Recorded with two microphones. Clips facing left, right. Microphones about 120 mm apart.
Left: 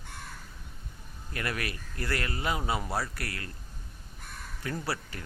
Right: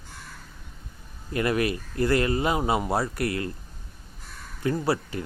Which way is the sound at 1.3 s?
20° right (ahead or behind).